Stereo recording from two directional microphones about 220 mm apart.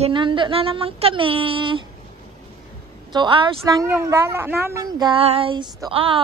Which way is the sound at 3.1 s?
20° right (ahead or behind).